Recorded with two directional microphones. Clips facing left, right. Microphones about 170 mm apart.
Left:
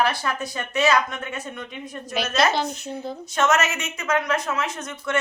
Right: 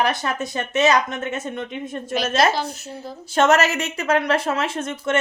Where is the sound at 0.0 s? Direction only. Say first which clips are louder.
Right 1 dB; 20° right (ahead or behind).